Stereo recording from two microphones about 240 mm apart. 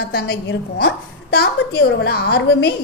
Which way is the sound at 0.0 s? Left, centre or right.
Left.